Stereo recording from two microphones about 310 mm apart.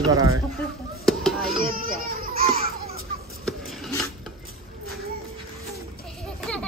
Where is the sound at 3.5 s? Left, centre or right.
Centre.